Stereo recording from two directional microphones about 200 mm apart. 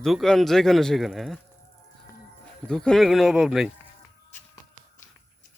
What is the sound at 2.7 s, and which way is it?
Speech, 5° left (ahead or behind).